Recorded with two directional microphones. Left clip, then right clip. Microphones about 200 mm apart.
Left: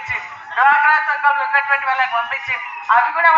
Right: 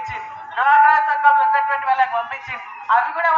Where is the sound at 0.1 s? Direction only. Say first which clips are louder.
Left 4 dB; 20° left (ahead or behind).